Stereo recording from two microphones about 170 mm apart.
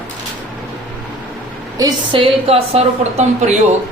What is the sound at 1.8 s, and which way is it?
A woman's voice, 30° right (ahead or behind).